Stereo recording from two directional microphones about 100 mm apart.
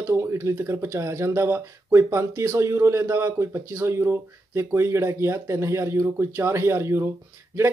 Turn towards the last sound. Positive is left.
turn(degrees=-25)  # may be behind; listen again after turning